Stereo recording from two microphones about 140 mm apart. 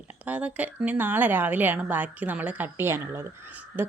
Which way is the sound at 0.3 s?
10° right (ahead or behind).